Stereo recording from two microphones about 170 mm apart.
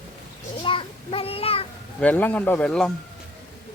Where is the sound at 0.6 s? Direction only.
30° left (ahead or behind).